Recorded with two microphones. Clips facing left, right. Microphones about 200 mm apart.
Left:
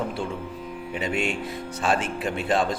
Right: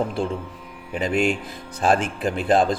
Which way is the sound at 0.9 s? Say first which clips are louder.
Right 5 dB; 35° right (ahead or behind).